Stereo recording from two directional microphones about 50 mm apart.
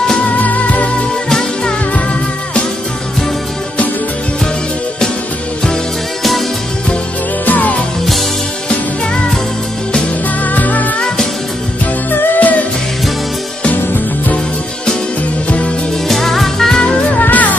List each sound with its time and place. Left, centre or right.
0.4 s music: left
7.4 s music: left
10.4 s music: left
12.1 s music: left
16.1 s music: centre
17.1 s music: left